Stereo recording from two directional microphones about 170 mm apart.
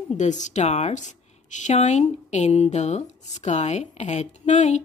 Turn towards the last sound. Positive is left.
turn(degrees=45)  # may be behind; listen again after turning